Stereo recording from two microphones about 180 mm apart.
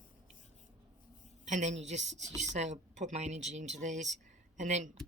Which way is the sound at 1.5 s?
40° right (ahead or behind).